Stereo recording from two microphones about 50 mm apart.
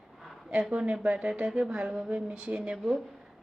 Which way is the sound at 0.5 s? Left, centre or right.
Centre.